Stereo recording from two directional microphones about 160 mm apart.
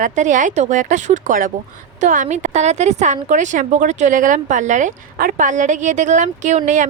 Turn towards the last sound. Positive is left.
turn(degrees=-50)  # may be behind; listen again after turning